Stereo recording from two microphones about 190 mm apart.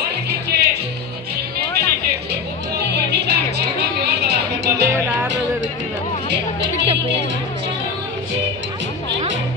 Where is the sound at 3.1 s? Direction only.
60° right (ahead or behind).